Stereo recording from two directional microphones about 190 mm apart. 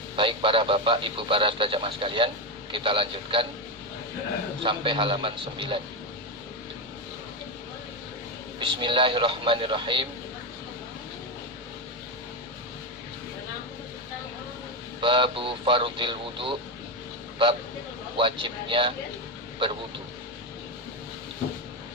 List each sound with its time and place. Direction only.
0.2 s speech: 25° right (ahead or behind)
4.6 s speech: 25° right (ahead or behind)
8.5 s speech: 25° right (ahead or behind)
15.0 s speech: 25° right (ahead or behind)
18.2 s speech: 25° right (ahead or behind)